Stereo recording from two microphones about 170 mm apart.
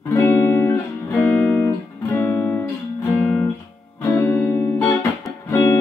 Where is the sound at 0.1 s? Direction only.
15° left (ahead or behind).